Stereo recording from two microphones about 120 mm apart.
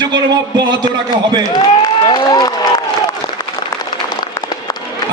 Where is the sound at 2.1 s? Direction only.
35° left (ahead or behind).